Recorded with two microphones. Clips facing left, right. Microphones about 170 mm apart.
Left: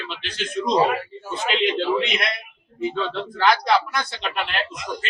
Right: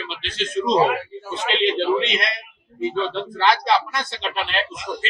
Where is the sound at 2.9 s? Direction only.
Centre (ahead or behind).